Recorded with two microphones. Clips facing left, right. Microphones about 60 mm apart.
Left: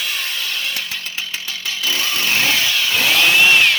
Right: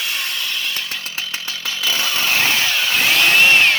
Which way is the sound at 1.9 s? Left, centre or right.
Centre.